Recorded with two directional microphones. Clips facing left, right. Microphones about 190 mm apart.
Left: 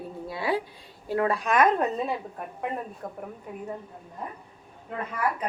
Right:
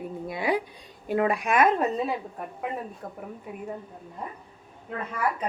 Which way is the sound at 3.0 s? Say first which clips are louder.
Left 2 dB; centre (ahead or behind).